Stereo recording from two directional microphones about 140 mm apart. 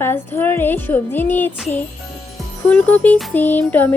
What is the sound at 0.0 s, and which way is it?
A woman's voice, 15° left (ahead or behind).